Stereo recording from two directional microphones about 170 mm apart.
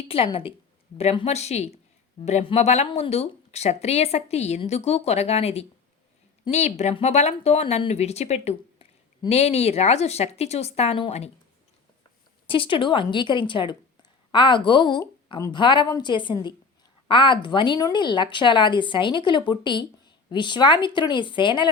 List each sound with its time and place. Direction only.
0.1 s a woman's voice: 35° left (ahead or behind)
12.5 s speech: 30° left (ahead or behind)